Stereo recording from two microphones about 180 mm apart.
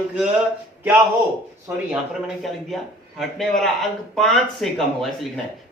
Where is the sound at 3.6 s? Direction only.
5° left (ahead or behind).